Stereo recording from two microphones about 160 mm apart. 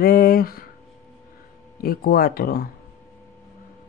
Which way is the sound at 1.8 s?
65° left (ahead or behind).